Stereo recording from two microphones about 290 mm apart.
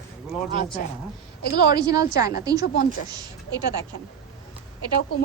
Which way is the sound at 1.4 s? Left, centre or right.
Left.